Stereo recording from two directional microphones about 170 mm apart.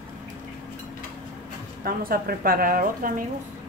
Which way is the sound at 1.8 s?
60° right (ahead or behind).